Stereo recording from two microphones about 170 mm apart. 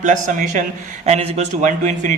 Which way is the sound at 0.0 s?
50° right (ahead or behind).